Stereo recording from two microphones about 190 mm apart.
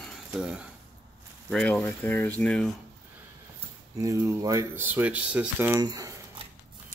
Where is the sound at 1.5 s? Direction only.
10° left (ahead or behind).